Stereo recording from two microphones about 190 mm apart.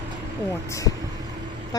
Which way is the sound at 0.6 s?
15° left (ahead or behind).